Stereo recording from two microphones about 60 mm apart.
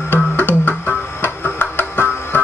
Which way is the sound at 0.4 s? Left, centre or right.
Left.